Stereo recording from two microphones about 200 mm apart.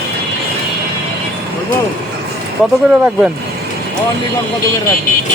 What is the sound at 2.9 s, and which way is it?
Speech, 5° right (ahead or behind).